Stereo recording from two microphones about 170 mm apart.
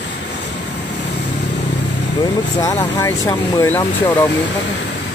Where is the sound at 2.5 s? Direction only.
20° left (ahead or behind).